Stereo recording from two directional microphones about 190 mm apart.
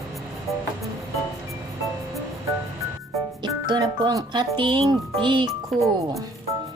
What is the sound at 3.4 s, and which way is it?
Speech, 25° right (ahead or behind).